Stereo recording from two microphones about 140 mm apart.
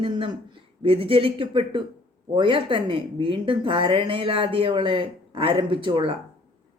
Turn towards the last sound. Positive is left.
turn(degrees=-35)  # may be behind; listen again after turning